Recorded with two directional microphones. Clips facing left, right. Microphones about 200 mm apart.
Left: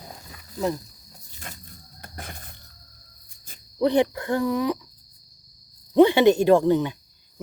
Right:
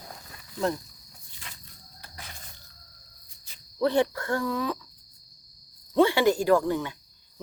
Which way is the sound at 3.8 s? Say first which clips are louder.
Left 3 dB; 15° left (ahead or behind).